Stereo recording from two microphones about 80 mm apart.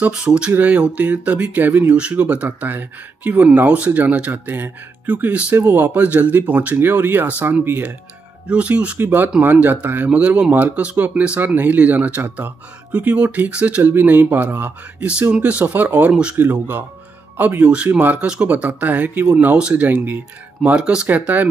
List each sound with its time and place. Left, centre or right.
0.1 s speech: centre